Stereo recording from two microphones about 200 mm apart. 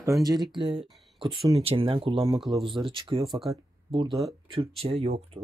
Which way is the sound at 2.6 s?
25° right (ahead or behind).